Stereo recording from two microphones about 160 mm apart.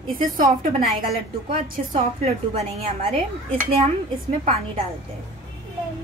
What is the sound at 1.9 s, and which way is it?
Speech, 40° right (ahead or behind).